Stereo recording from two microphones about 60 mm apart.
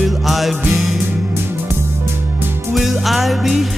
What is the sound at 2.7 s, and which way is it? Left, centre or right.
Music, centre.